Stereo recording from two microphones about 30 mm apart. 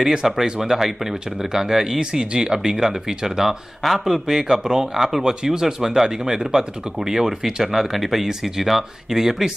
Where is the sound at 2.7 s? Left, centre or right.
Centre.